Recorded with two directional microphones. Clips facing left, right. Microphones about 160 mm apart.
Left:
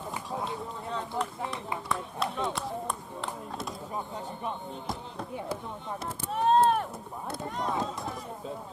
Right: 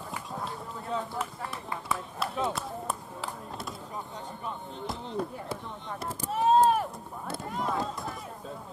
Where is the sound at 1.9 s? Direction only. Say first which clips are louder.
Even; centre (ahead or behind).